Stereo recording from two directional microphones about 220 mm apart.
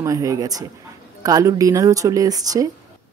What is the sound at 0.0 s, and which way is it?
Speech, 15° right (ahead or behind).